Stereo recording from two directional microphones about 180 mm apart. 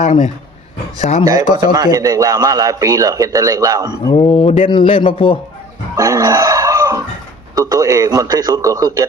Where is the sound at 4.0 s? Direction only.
20° left (ahead or behind).